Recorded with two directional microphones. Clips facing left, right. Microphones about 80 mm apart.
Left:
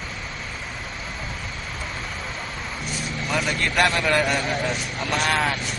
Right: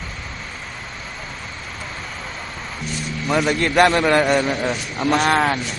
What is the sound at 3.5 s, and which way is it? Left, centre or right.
A man's voice, right.